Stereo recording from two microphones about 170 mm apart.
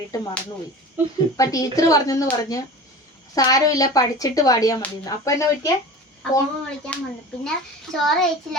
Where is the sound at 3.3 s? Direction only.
20° left (ahead or behind).